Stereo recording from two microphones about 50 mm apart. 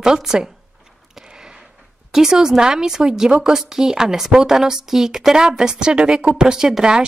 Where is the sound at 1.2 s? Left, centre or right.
Centre.